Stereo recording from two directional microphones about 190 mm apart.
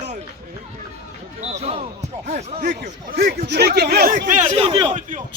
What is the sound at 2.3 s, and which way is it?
Speech, 35° right (ahead or behind).